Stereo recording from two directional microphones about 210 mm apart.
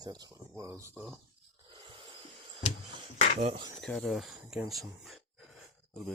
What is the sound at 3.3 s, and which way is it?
Speech, 25° right (ahead or behind).